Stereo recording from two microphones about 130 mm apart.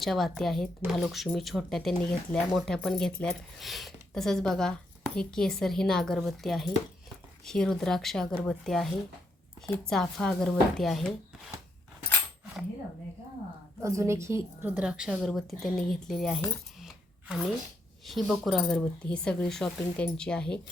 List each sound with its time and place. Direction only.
0.0 s speech: centre (ahead or behind)
13.8 s a woman's voice: 25° right (ahead or behind)
14.8 s a woman's voice: 5° right (ahead or behind)